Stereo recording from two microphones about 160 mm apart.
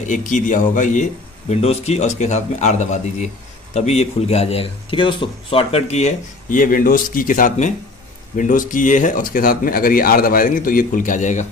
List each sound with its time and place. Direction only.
0.0 s a man's voice: 50° left (ahead or behind)